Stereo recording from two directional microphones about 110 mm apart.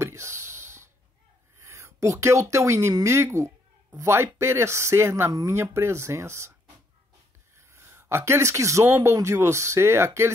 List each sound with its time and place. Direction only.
0.0 s a sound: 25° right (ahead or behind)
1.6 s speech: 25° right (ahead or behind)
7.5 s speech: 25° right (ahead or behind)